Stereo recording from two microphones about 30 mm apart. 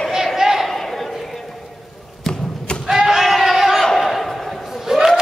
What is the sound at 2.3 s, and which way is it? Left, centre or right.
Thump, centre.